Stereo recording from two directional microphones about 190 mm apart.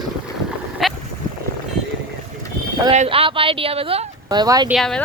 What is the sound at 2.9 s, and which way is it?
Speech, 35° right (ahead or behind).